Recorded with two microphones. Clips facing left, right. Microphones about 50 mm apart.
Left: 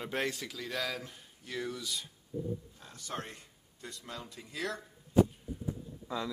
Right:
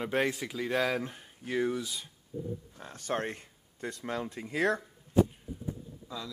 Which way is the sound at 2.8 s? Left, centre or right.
Right.